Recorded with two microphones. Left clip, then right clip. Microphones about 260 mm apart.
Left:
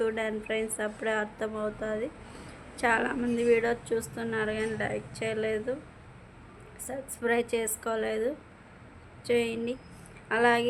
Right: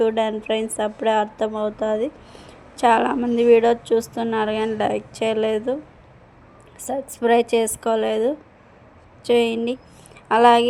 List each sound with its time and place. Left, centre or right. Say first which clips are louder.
0.0 s a woman's voice: right 10 dB; right
6.8 s a woman's voice: right 10 dB; right